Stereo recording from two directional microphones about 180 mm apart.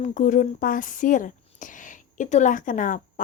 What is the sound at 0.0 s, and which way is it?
A woman's voice, 45° left (ahead or behind).